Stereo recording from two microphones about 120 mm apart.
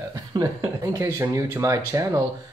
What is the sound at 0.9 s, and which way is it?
Speech, 25° right (ahead or behind).